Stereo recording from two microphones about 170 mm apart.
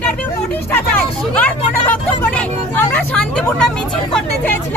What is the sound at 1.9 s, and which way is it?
Vehicle, 10° left (ahead or behind).